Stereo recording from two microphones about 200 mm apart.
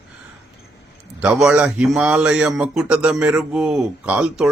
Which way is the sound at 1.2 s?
5° right (ahead or behind).